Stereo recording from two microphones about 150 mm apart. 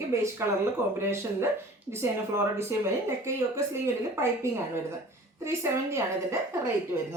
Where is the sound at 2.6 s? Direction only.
15° right (ahead or behind).